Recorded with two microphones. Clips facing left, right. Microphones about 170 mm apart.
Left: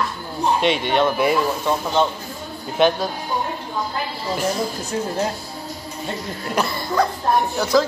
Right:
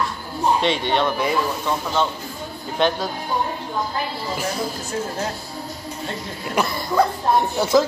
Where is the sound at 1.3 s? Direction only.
15° left (ahead or behind).